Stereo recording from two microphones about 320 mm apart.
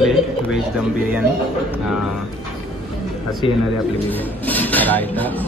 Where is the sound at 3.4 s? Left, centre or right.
Centre.